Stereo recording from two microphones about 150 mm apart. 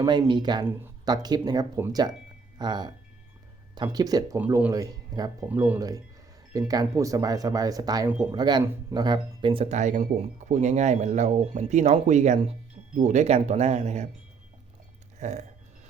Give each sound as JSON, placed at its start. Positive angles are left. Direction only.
{"t": 0.0, "sound": "speech", "side_deg": -30}
{"t": 4.4, "sound": "speech", "side_deg": -15}
{"t": 5.5, "sound": "speech", "side_deg": -10}
{"t": 6.5, "sound": "speech", "side_deg": -25}
{"t": 15.2, "sound": "burping", "side_deg": -50}